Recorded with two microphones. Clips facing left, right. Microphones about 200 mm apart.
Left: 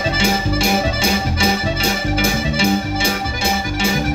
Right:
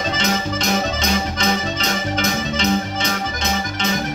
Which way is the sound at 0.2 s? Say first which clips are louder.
Left 5 dB; 10° left (ahead or behind).